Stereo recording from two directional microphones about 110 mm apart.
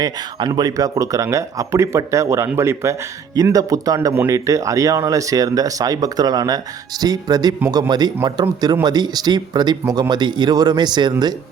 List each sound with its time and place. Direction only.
0.0 s speech: 40° right (ahead or behind)